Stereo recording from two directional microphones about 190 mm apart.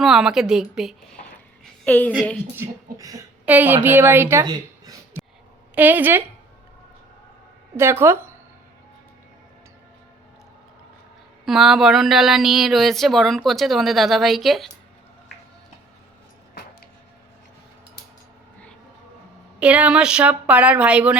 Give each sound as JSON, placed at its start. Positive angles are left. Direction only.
{"t": 0.0, "sound": "speech", "side_deg": -5}
{"t": 1.2, "sound": "a sound", "side_deg": 45}
{"t": 1.6, "sound": "a sound", "side_deg": 5}
{"t": 2.6, "sound": "a woman's voice", "side_deg": -15}
{"t": 7.8, "sound": "a woman's voice", "side_deg": -10}
{"t": 11.4, "sound": "speech", "side_deg": 0}
{"t": 19.5, "sound": "a woman's voice", "side_deg": -5}